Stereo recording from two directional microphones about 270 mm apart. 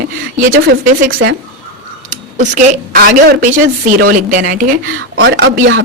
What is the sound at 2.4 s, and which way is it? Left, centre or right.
A woman's voice, right.